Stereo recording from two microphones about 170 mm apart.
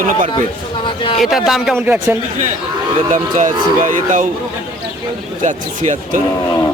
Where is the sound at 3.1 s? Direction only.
50° right (ahead or behind).